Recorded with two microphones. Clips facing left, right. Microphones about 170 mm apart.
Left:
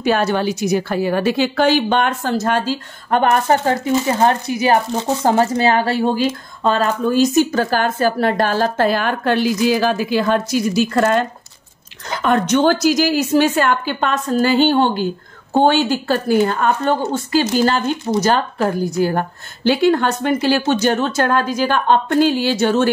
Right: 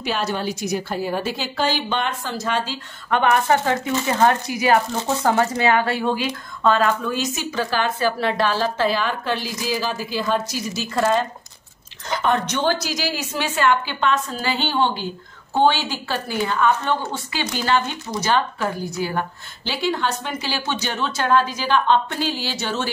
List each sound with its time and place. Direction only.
0.0 s a woman's voice: 55° left (ahead or behind)